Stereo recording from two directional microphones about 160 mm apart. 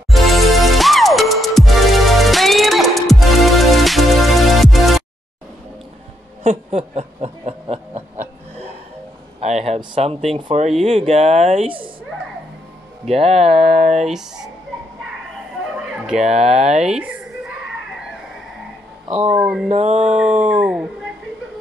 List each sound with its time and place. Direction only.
0.1 s music: centre (ahead or behind)
6.4 s a sound: 40° right (ahead or behind)
9.8 s speech: 35° right (ahead or behind)
13.0 s speech: 40° right (ahead or behind)
15.6 s a sound: 5° right (ahead or behind)
16.2 s speech: 40° right (ahead or behind)
16.9 s a sound: 10° right (ahead or behind)
19.2 s speech: 10° right (ahead or behind)
19.7 s speech: 45° right (ahead or behind)
20.4 s speech: 10° right (ahead or behind)